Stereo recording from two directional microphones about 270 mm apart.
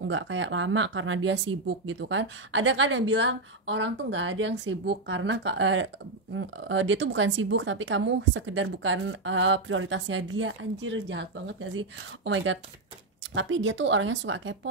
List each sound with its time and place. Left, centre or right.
0.1 s speech: right